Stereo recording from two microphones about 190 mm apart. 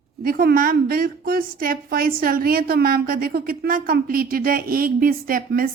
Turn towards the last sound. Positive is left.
turn(degrees=-50)  # may be behind; listen again after turning